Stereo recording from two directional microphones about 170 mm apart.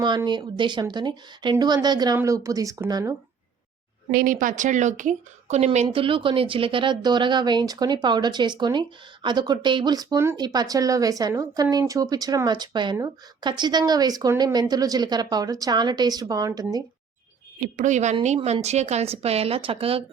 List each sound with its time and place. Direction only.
0.0 s speech: 25° right (ahead or behind)
4.1 s speech: 55° right (ahead or behind); by 16.8 s 20° right (ahead or behind)
17.6 s speech: 45° right (ahead or behind)